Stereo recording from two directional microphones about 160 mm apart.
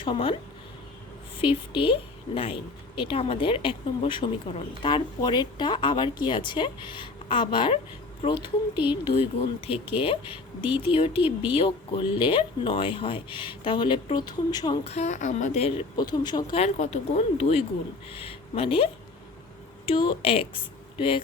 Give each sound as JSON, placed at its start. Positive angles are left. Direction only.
{"t": 0.0, "sound": "a woman's voice", "side_deg": 30}
{"t": 1.4, "sound": "a woman's voice", "side_deg": 30}
{"t": 14.8, "sound": "speech", "side_deg": 45}
{"t": 16.0, "sound": "speech", "side_deg": 25}
{"t": 16.6, "sound": "a woman's voice", "side_deg": 45}